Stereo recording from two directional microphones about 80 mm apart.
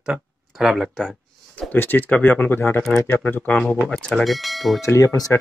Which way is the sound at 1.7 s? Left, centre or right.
Left.